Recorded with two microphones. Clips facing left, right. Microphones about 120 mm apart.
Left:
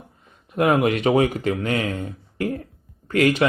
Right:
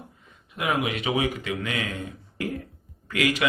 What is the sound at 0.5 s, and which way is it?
Speech, 50° left (ahead or behind).